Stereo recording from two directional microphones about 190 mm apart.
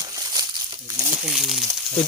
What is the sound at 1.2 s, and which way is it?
Speech, 5° right (ahead or behind).